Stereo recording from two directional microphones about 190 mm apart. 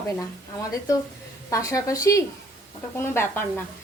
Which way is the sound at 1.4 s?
15° left (ahead or behind).